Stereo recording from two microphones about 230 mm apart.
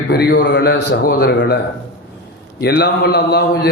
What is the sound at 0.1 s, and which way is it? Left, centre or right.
A man's voice, left.